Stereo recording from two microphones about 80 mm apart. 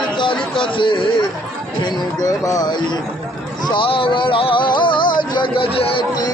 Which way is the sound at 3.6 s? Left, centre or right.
Left.